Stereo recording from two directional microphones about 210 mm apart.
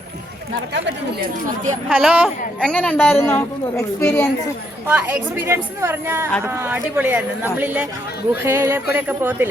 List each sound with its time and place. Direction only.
1.9 s a woman's voice: 5° right (ahead or behind)
4.9 s speech: 10° right (ahead or behind)